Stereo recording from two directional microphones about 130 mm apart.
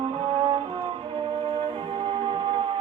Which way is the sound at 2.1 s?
45° right (ahead or behind).